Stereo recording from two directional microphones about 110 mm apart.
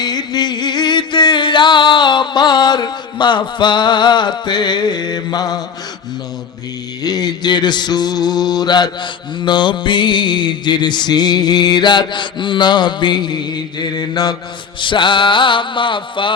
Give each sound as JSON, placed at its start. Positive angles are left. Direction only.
{"t": 0.0, "sound": "music", "side_deg": 40}
{"t": 7.0, "sound": "mantra", "side_deg": 40}
{"t": 14.8, "sound": "music", "side_deg": 50}